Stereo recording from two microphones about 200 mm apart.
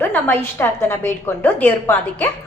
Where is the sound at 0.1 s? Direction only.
10° left (ahead or behind).